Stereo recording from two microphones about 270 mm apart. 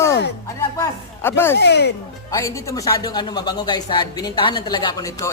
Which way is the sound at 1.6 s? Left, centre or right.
Left.